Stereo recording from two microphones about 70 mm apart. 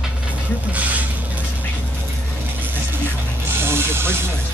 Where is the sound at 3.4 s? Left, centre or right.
Right.